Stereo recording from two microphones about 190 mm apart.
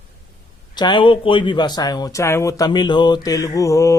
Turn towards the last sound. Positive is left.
turn(degrees=15)  # may be behind; listen again after turning